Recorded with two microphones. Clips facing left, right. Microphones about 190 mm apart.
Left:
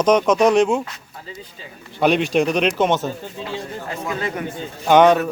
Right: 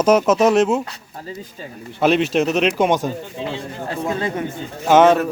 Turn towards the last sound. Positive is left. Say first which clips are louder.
# even
turn(degrees=-5)  # may be behind; listen again after turning